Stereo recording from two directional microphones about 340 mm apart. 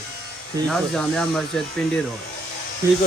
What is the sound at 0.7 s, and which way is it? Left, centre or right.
Speech, centre.